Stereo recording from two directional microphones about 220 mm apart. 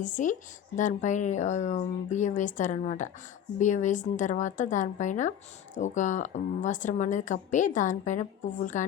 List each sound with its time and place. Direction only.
0.0 s a woman's voice: 35° left (ahead or behind)